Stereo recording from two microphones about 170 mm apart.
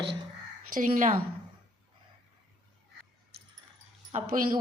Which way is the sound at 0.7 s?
50° right (ahead or behind).